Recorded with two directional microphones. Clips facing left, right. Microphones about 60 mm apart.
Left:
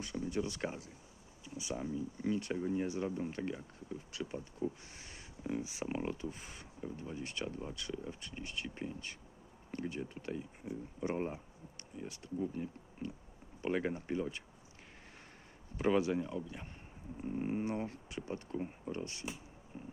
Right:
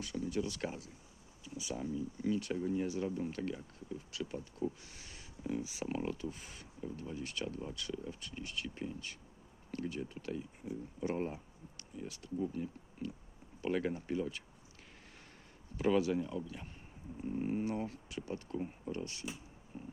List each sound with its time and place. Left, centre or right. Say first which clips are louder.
0.0 s speech: even; left
2.8 s speech: even; left
4.8 s a sound: left 1 dB; left
5.4 s speech: even; centre
15.8 s speech: even; left
19.7 s a sound: right 1 dB; centre